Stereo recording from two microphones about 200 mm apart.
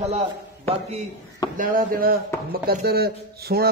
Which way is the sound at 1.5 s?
45° right (ahead or behind).